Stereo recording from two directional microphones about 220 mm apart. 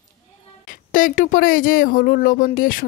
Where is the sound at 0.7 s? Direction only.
35° left (ahead or behind).